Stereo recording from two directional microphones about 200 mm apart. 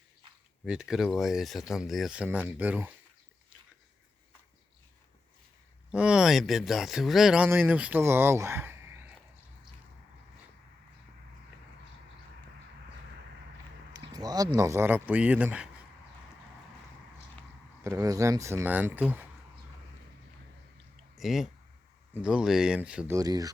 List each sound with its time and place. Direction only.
0.6 s speech: 5° right (ahead or behind)
5.9 s speech: 5° right (ahead or behind)
13.9 s speech: 20° right (ahead or behind)
17.8 s speech: 15° right (ahead or behind)
21.2 s speech: centre (ahead or behind)
23.1 s speech: 20° right (ahead or behind)